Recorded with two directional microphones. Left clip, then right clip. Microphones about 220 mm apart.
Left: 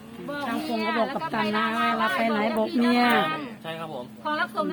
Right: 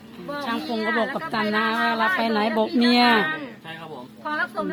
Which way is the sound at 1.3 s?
40° right (ahead or behind).